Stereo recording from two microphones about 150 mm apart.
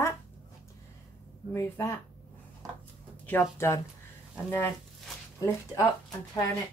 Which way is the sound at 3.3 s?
15° left (ahead or behind).